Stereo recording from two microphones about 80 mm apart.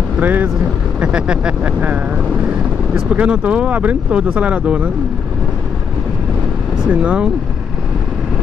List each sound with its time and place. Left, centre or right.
0.2 s speech: right
6.9 s speech: centre